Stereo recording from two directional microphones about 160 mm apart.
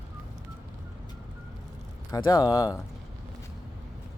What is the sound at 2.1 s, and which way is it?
Speech, 25° left (ahead or behind).